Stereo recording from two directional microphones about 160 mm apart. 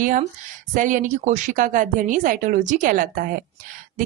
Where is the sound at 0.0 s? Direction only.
60° right (ahead or behind).